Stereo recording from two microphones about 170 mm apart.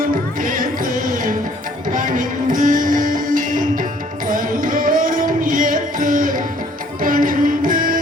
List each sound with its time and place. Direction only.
0.0 s music: 55° right (ahead or behind)